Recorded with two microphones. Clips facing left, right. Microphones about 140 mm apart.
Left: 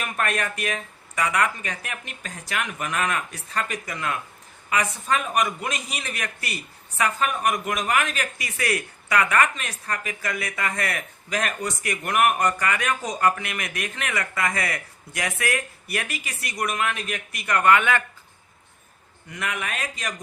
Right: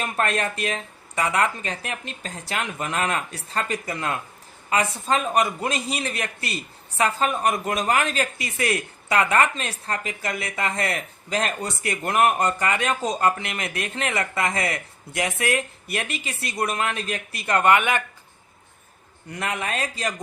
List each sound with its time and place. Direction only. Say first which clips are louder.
0.0 s a man's voice: right 2 dB; 30° right (ahead or behind)
19.3 s speech: right 3 dB; 30° right (ahead or behind)